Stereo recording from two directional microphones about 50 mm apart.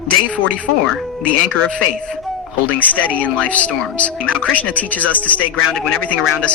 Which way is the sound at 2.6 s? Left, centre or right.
Left.